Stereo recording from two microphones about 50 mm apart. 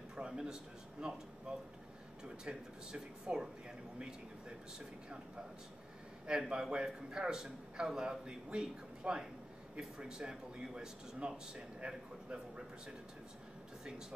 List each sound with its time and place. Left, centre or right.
0.1 s a sound: centre
1.0 s speech: centre
6.2 s speech: centre